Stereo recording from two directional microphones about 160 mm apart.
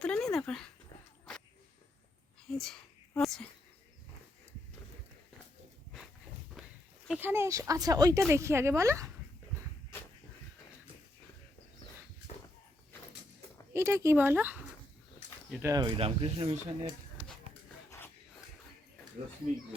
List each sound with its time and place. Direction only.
0.0 s a sound: 5° left (ahead or behind)
3.2 s a sound: centre (ahead or behind)
6.6 s walk: centre (ahead or behind)
7.1 s speech: 10° right (ahead or behind)
13.7 s speech: 15° right (ahead or behind)
15.6 s speech: 20° right (ahead or behind)
16.0 s speech: 35° right (ahead or behind)